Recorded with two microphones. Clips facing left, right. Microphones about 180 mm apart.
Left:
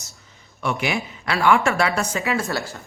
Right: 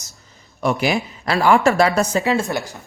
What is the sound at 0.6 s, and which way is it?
Speech, 35° right (ahead or behind).